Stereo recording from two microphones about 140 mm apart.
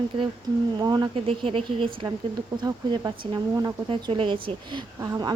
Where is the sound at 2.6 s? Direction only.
30° right (ahead or behind).